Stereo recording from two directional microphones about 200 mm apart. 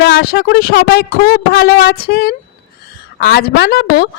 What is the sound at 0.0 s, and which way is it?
A woman's voice, 50° left (ahead or behind).